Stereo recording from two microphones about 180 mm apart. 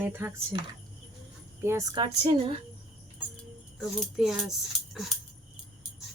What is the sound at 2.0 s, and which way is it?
Speech, 35° right (ahead or behind).